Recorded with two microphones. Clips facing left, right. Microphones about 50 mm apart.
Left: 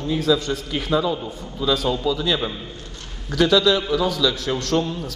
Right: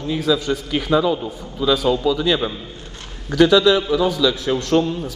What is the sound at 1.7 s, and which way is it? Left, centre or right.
A man's voice, centre.